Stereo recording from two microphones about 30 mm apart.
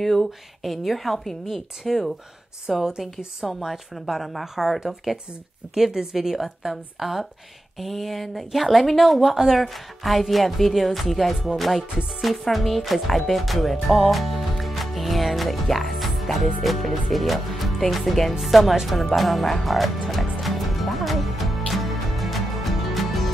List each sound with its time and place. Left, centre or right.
0.0 s a woman's voice: centre
9.2 s speech: centre
18.9 s music: centre